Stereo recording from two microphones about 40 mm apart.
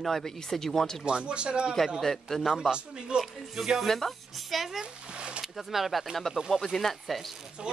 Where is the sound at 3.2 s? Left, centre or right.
Centre.